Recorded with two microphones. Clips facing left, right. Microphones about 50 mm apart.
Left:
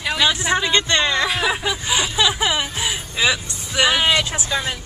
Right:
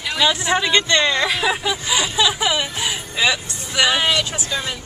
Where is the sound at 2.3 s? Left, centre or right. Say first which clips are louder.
Even; centre.